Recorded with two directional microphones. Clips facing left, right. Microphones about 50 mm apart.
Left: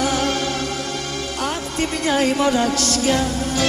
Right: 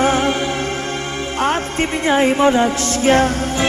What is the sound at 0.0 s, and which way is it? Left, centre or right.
Music, right.